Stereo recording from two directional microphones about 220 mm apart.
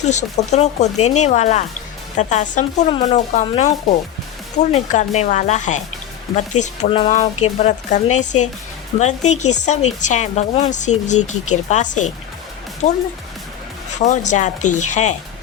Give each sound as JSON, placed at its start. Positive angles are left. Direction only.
{"t": 0.0, "sound": "speech", "side_deg": 30}
{"t": 14.0, "sound": "speech", "side_deg": 35}